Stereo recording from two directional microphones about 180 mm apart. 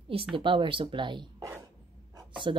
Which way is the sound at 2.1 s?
25° right (ahead or behind).